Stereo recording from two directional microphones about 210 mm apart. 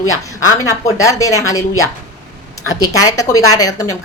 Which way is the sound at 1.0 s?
15° left (ahead or behind).